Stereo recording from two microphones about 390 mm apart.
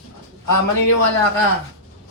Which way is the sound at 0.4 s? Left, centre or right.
Left.